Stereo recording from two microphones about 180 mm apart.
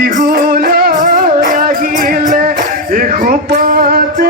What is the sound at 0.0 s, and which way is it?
Music, 45° right (ahead or behind).